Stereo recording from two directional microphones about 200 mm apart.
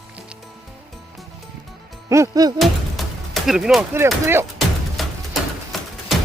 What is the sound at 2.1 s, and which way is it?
Music, 15° right (ahead or behind).